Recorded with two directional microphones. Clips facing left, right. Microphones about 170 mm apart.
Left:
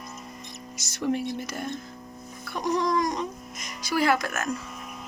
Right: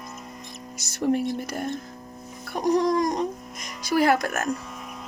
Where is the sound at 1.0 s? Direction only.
45° right (ahead or behind).